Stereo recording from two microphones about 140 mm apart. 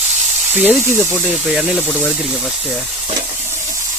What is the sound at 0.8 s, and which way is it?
Speech, 15° right (ahead or behind).